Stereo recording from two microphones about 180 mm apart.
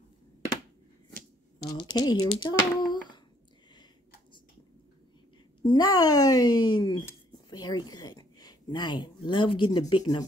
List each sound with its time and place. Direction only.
1.6 s a woman's voice: 20° left (ahead or behind)
5.6 s speech: 25° left (ahead or behind)